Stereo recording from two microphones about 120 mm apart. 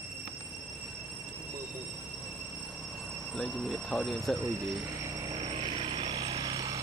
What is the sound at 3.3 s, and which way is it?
Speech, centre (ahead or behind).